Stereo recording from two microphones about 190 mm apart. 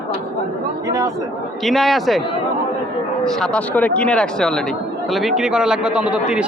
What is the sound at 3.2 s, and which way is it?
A man's voice, 5° left (ahead or behind).